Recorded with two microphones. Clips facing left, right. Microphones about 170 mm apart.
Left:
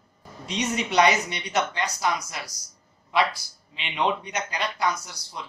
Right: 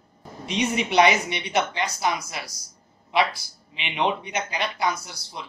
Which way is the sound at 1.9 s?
5° right (ahead or behind).